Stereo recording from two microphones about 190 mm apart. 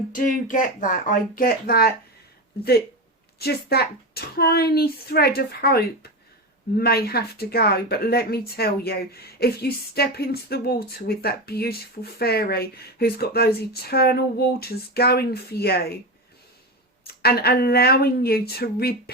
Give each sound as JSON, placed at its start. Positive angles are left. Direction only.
{"t": 0.1, "sound": "speech", "side_deg": 45}
{"t": 17.1, "sound": "speech", "side_deg": 55}